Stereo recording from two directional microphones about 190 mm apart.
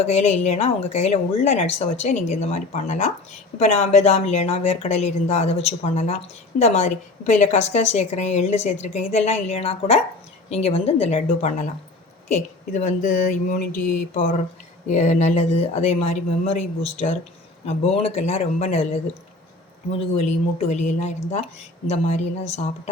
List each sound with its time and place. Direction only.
0.0 s speech: 35° left (ahead or behind)
19.9 s speech: 35° left (ahead or behind)